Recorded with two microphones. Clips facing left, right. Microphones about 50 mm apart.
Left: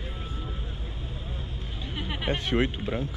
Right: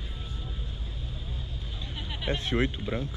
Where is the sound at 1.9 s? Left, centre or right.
Left.